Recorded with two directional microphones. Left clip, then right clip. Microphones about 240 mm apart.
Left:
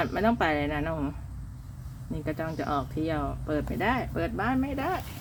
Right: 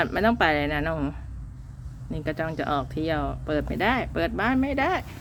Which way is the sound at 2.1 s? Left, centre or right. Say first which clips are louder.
Right 4 dB; centre.